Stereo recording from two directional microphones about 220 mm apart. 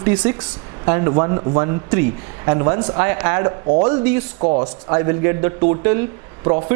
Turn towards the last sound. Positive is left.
turn(degrees=-25)  # may be behind; listen again after turning